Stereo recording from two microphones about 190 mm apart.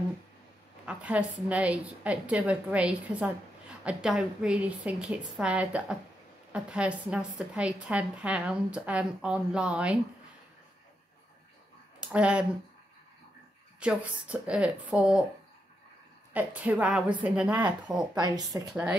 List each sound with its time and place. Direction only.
0.8 s a woman's voice: 5° right (ahead or behind)
12.1 s a woman's voice: 5° right (ahead or behind)
13.7 s a woman's voice: 5° right (ahead or behind)
16.3 s a woman's voice: 10° right (ahead or behind)
18.1 s speech: 20° right (ahead or behind)